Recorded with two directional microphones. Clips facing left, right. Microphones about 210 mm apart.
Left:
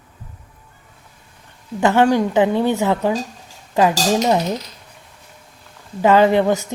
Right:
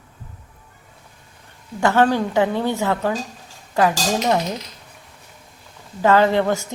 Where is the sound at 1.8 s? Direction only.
15° left (ahead or behind).